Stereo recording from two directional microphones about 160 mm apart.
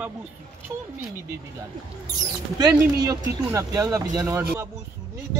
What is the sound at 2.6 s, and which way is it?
Speech, 25° right (ahead or behind).